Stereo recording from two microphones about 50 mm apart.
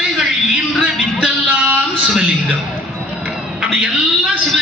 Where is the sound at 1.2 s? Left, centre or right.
Right.